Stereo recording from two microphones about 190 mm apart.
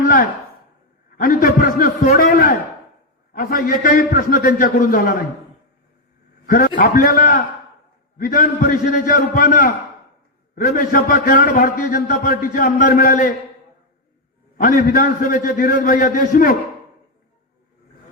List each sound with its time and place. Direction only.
0.0 s chopping: 50° left (ahead or behind)
1.1 s a man's voice: 50° left (ahead or behind)
6.4 s a man's voice: 45° left (ahead or behind)
14.6 s a man's voice: 50° left (ahead or behind)